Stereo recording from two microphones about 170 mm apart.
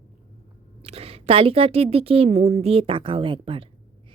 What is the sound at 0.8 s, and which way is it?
A woman's voice, 35° right (ahead or behind).